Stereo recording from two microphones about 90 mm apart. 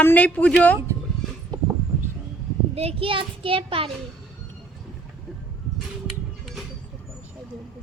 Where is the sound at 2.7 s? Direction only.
90° right.